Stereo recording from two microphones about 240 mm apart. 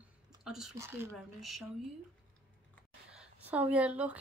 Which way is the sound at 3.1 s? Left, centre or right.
Centre.